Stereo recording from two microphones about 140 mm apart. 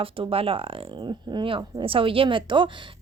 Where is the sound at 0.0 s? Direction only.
40° right (ahead or behind).